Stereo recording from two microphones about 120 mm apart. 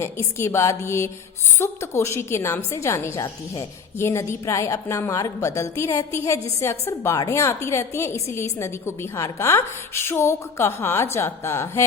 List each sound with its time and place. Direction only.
0.0 s a woman's voice: 25° left (ahead or behind)